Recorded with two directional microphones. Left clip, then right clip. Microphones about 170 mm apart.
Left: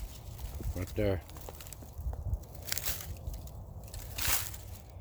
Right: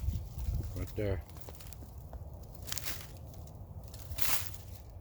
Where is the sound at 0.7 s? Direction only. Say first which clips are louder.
Left 5 dB; 50° left (ahead or behind).